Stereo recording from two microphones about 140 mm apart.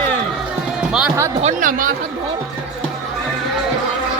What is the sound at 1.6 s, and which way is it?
Speech, 75° right (ahead or behind).